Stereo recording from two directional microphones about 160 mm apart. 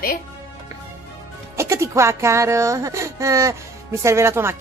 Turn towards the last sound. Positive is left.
turn(degrees=-15)  # may be behind; listen again after turning